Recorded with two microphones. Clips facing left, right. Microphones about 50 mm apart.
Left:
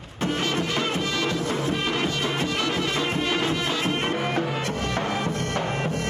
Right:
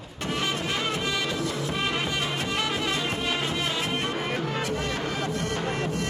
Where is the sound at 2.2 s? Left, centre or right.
Left.